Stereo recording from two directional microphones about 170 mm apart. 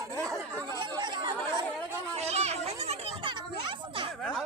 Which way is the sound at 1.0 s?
25° right (ahead or behind).